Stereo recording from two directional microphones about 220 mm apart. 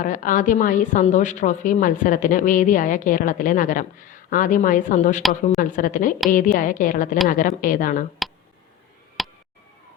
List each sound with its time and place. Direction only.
0.0 s a woman's voice: 35° left (ahead or behind)
9.2 s tick: centre (ahead or behind)